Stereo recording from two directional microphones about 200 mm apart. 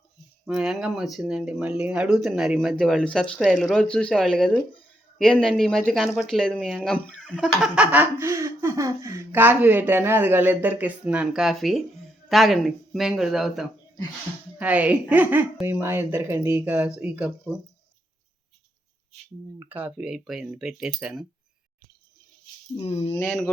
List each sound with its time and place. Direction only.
0.4 s speech: 5° right (ahead or behind)
19.5 s speech: 10° right (ahead or behind)
22.7 s speech: 30° left (ahead or behind)
23.1 s speech: 5° left (ahead or behind)